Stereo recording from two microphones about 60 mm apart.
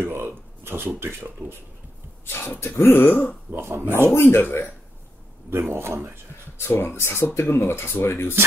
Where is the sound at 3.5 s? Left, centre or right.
Right.